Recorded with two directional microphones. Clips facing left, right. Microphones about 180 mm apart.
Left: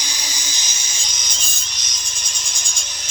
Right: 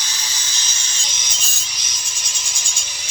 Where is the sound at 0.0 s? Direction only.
15° left (ahead or behind).